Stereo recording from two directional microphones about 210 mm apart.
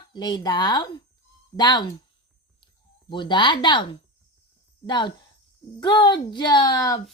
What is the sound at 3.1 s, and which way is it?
Speech, 20° left (ahead or behind).